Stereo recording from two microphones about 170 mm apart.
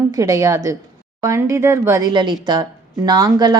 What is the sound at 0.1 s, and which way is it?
A woman's voice, 20° right (ahead or behind).